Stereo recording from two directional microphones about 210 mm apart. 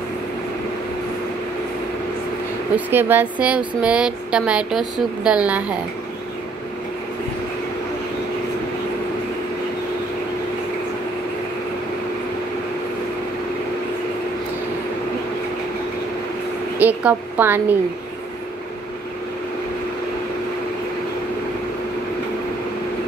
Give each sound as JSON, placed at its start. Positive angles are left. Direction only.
{"t": 2.7, "sound": "speech", "side_deg": -10}
{"t": 16.7, "sound": "a woman's voice", "side_deg": -10}